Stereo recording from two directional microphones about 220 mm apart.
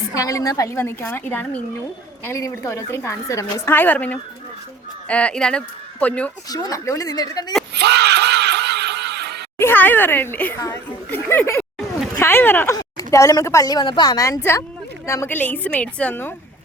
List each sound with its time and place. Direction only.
0.1 s speech: 15° left (ahead or behind)
6.5 s speech: 15° left (ahead or behind)
7.7 s a sound: 50° right (ahead or behind)
9.6 s speech: 10° left (ahead or behind)